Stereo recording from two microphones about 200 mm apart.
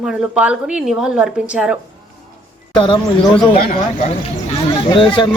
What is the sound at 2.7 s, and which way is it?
Speech, 25° left (ahead or behind).